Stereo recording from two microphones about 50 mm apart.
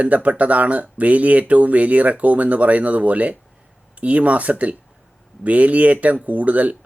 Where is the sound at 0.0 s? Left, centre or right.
Right.